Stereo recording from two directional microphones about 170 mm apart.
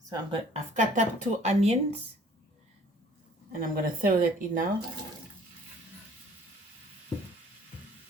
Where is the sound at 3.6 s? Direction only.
55° right (ahead or behind).